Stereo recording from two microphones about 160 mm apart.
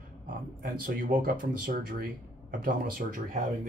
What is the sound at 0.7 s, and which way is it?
Speech, 60° right (ahead or behind).